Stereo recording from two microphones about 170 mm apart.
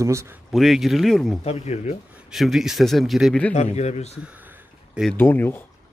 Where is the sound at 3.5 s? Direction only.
40° left (ahead or behind).